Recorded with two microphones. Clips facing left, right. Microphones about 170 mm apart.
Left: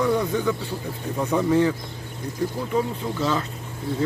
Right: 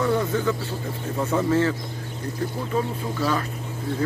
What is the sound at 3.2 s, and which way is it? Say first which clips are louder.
Speech: even; 20° left (ahead or behind).